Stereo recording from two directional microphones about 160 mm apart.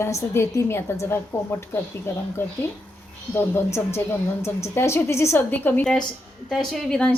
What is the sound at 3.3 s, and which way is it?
A woman's voice, 15° left (ahead or behind).